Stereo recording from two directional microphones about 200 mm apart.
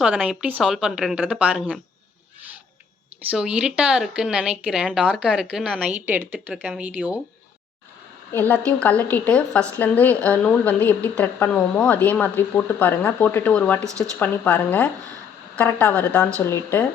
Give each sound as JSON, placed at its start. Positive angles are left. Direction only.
{"t": 0.0, "sound": "speech", "side_deg": -5}
{"t": 3.2, "sound": "speech", "side_deg": -5}
{"t": 8.3, "sound": "a woman's voice", "side_deg": 10}
{"t": 13.8, "sound": "speech", "side_deg": -15}
{"t": 14.2, "sound": "a woman's voice", "side_deg": 5}